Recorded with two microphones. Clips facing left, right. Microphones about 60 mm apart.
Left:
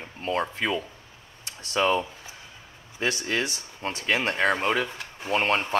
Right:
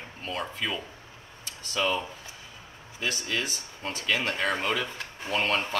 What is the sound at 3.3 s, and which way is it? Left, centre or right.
Speech, left.